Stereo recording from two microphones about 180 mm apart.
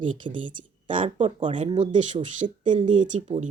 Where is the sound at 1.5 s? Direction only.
40° right (ahead or behind).